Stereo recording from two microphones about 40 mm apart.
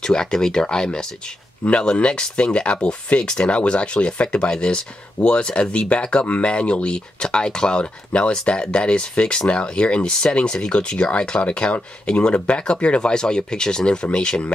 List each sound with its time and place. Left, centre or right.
0.0 s speech: centre